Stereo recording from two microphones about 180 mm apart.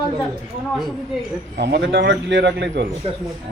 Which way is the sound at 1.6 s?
80° right.